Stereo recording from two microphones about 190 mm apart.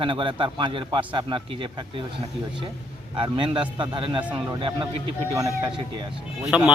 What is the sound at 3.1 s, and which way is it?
Speech, 25° right (ahead or behind).